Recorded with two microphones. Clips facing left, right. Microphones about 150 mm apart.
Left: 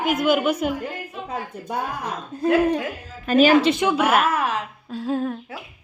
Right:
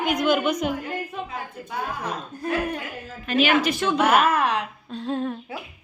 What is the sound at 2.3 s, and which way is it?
Speech, 25° left (ahead or behind).